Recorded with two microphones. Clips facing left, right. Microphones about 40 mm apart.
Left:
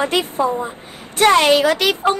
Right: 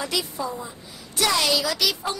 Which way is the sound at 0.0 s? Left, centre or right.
Left.